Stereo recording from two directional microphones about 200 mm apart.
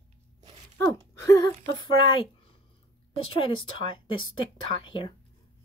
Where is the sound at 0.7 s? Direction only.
15° left (ahead or behind).